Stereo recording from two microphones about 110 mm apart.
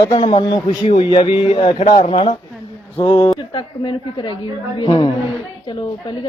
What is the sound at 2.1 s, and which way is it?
Speech, 60° left (ahead or behind).